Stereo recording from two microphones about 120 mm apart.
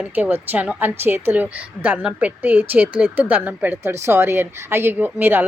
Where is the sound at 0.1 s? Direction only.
15° right (ahead or behind).